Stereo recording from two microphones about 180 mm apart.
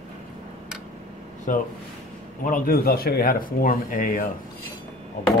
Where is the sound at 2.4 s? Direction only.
50° left (ahead or behind).